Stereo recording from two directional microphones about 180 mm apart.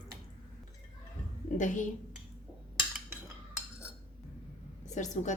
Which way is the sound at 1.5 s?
45° left (ahead or behind).